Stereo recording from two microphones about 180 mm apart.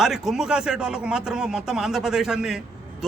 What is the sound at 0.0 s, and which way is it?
A man's voice, centre (ahead or behind).